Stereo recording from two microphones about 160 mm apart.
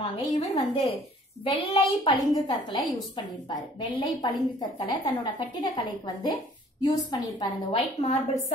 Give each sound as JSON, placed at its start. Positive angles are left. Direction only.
{"t": 0.0, "sound": "a woman's voice", "side_deg": 40}